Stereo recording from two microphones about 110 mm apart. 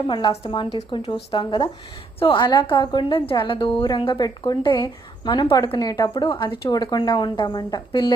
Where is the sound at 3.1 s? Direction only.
55° left (ahead or behind).